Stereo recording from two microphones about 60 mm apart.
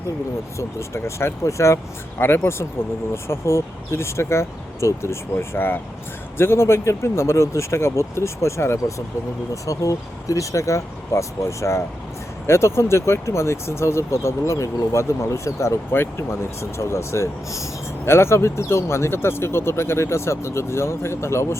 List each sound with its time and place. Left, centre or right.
0.8 s speech: left
5.5 s speech: left
9.6 s speech: left